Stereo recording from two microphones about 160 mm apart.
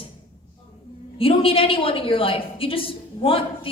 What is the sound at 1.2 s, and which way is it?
A woman's voice, 35° left (ahead or behind).